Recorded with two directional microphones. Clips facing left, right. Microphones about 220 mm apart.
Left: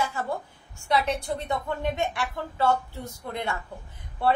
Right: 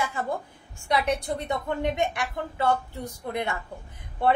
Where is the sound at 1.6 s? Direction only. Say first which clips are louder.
Right 4 dB; 20° right (ahead or behind).